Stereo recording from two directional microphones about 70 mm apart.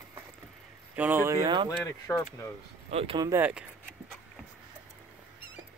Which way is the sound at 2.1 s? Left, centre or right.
Left.